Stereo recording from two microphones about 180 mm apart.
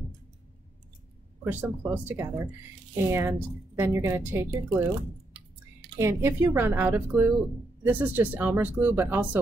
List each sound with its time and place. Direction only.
1.4 s a woman's voice: 10° right (ahead or behind)
5.9 s a woman's voice: 15° right (ahead or behind)